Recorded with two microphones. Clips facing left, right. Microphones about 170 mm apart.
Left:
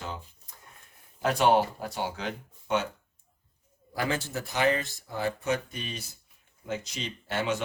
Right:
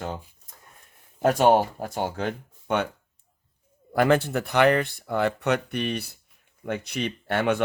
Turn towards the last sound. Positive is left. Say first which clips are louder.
# right 6 dB
turn(degrees=-60)  # may be behind; listen again after turning